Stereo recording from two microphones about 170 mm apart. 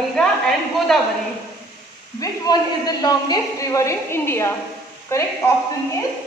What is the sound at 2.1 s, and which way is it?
A woman's voice, 25° left (ahead or behind).